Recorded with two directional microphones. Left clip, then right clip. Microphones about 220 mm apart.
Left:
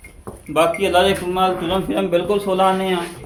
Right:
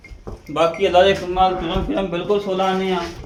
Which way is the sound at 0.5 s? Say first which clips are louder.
Even; 45° left (ahead or behind).